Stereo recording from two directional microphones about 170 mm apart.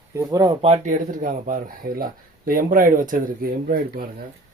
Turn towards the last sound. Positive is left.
turn(degrees=-55)  # may be behind; listen again after turning